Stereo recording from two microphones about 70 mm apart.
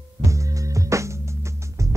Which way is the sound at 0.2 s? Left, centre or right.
Right.